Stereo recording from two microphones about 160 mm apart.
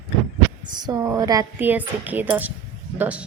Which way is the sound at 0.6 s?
25° right (ahead or behind).